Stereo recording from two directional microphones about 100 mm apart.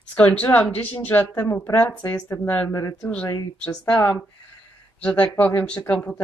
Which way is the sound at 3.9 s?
15° left (ahead or behind).